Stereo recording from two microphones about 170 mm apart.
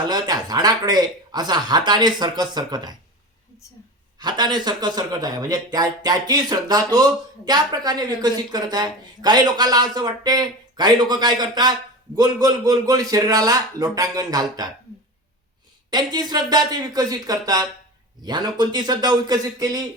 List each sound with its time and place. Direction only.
0.1 s speech: 25° right (ahead or behind)
4.2 s speech: 25° right (ahead or behind)
15.9 s speech: 25° right (ahead or behind)